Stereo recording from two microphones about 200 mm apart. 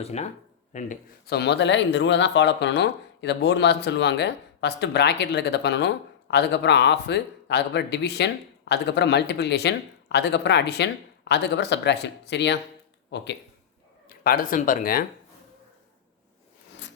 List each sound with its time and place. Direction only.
0.0 s a man's voice: 35° left (ahead or behind)
1.3 s speech: 55° left (ahead or behind)
14.3 s speech: 45° left (ahead or behind)